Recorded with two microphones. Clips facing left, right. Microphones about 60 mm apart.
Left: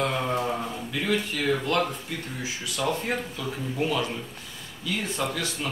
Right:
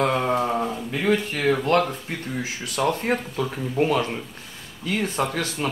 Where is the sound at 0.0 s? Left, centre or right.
Right.